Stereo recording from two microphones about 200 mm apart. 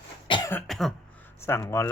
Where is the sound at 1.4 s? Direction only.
10° left (ahead or behind).